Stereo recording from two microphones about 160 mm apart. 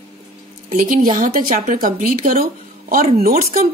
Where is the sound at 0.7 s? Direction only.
55° right (ahead or behind).